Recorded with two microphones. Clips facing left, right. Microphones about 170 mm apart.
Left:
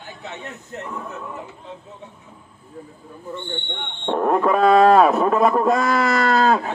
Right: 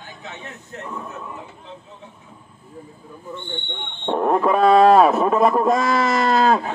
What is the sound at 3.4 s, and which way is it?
Speech, 10° right (ahead or behind).